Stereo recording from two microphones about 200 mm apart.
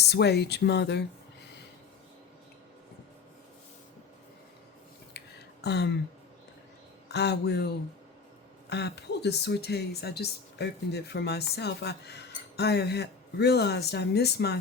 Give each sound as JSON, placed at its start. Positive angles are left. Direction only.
{"t": 0.0, "sound": "speech", "side_deg": 55}
{"t": 5.2, "sound": "a sound", "side_deg": 55}
{"t": 5.6, "sound": "speech", "side_deg": 55}
{"t": 7.1, "sound": "speech", "side_deg": 55}
{"t": 8.7, "sound": "speech", "side_deg": 55}